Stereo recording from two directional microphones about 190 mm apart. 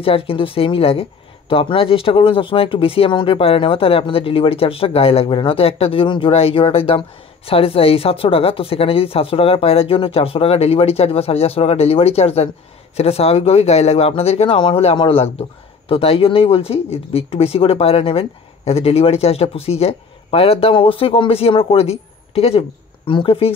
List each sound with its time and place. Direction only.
0.0 s a woman's voice: 30° left (ahead or behind)